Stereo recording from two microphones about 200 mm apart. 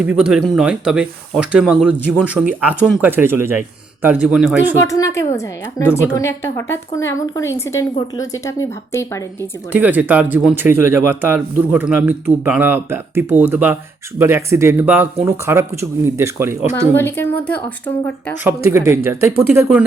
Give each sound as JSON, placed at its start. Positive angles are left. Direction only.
{"t": 0.0, "sound": "speech", "side_deg": -5}
{"t": 4.9, "sound": "a woman's voice", "side_deg": 15}
{"t": 9.4, "sound": "speech", "side_deg": -10}
{"t": 16.8, "sound": "a woman's voice", "side_deg": 10}
{"t": 18.4, "sound": "speech", "side_deg": -15}